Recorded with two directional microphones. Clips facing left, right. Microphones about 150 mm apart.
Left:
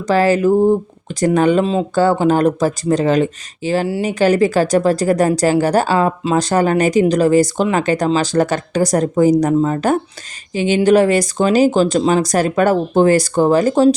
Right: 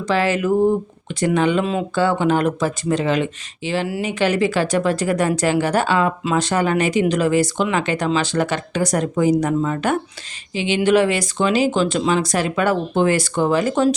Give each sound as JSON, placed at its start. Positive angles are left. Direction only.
{"t": 0.1, "sound": "speech", "side_deg": 40}